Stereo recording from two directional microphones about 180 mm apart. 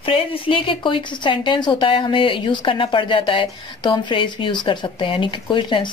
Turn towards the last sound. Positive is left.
turn(degrees=25)  # may be behind; listen again after turning